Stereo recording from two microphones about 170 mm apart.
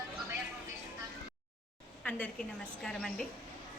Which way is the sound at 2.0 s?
5° left (ahead or behind).